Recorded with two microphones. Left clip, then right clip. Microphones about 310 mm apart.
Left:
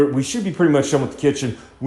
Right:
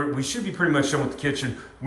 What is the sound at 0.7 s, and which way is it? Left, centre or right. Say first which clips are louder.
Speech: left 5 dB; left.